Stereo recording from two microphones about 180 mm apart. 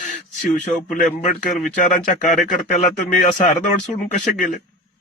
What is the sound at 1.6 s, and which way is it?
Speech, 45° left (ahead or behind).